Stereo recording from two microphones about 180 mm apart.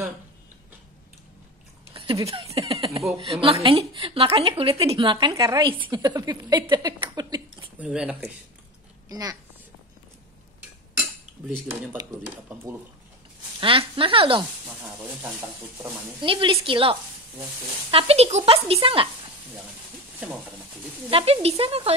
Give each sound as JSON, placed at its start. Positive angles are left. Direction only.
{"t": 2.1, "sound": "speech", "side_deg": -15}
{"t": 2.7, "sound": "a woman's voice", "side_deg": -30}
{"t": 7.8, "sound": "speech", "side_deg": -5}
{"t": 9.1, "sound": "a woman's voice", "side_deg": -20}
{"t": 11.7, "sound": "speech", "side_deg": -10}
{"t": 13.6, "sound": "a woman's voice", "side_deg": -30}
{"t": 16.2, "sound": "a woman's voice", "side_deg": -30}
{"t": 17.9, "sound": "speech", "side_deg": -35}
{"t": 21.1, "sound": "speech", "side_deg": -35}